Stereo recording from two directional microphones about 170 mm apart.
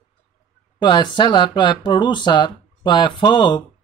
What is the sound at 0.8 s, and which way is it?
Speech, 25° left (ahead or behind).